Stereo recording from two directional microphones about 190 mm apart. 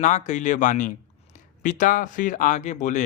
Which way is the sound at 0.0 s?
40° left (ahead or behind).